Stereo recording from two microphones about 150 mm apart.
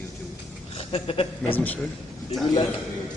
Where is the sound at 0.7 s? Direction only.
40° left (ahead or behind).